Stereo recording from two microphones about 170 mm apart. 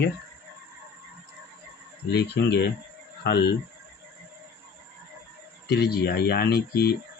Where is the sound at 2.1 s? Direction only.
75° left (ahead or behind).